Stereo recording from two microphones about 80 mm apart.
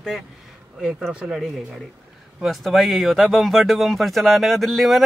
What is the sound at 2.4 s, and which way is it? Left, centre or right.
Speech, centre.